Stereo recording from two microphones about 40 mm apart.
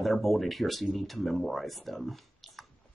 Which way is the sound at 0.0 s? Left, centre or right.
Centre.